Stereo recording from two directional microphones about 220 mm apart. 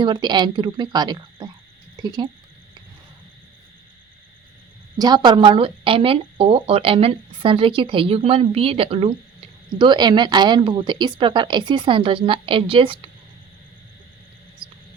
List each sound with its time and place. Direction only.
0.0 s speech: 20° right (ahead or behind)
4.9 s speech: 20° right (ahead or behind)